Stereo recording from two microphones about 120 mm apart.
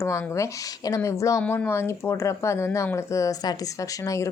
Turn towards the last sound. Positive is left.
turn(degrees=25)  # may be behind; listen again after turning